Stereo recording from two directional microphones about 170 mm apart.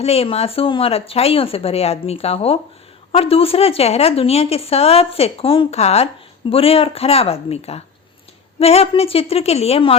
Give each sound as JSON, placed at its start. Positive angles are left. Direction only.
{"t": 0.0, "sound": "speech", "side_deg": 35}